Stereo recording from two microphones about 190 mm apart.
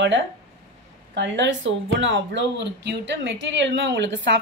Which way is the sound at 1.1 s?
70° right (ahead or behind).